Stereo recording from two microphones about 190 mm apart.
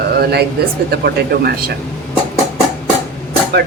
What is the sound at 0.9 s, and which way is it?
Speech, 55° right (ahead or behind).